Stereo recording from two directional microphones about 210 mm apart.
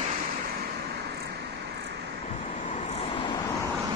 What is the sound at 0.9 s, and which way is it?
Vehicle, 50° right (ahead or behind).